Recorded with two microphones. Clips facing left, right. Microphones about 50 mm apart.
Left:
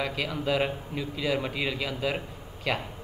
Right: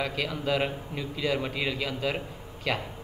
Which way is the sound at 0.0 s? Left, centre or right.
Centre.